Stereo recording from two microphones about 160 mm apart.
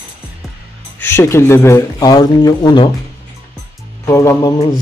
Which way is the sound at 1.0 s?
15° left (ahead or behind).